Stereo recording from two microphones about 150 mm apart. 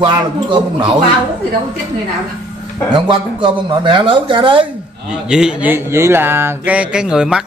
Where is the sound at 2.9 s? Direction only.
30° right (ahead or behind).